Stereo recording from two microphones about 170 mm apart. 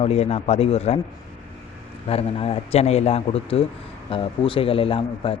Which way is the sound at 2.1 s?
35° left (ahead or behind).